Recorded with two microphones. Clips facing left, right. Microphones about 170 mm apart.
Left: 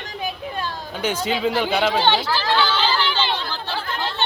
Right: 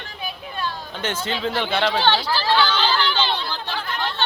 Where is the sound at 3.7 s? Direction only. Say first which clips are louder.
Left 1 dB; 35° left (ahead or behind).